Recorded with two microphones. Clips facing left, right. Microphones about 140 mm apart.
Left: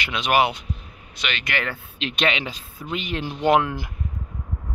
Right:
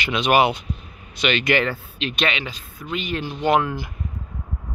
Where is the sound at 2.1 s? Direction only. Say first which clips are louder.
Left 2 dB; 15° left (ahead or behind).